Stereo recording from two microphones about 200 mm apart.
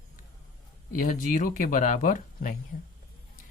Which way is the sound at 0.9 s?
40° left (ahead or behind).